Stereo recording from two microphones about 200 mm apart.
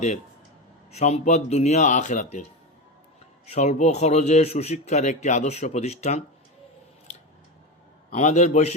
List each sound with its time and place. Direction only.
0.9 s speech: 35° left (ahead or behind)
8.1 s speech: 35° left (ahead or behind)